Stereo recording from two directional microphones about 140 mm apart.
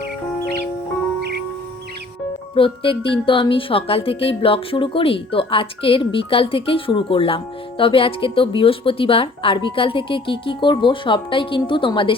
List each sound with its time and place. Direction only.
2.6 s speech: 40° left (ahead or behind)